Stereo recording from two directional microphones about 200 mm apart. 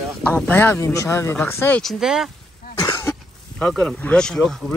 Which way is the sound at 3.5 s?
5° left (ahead or behind).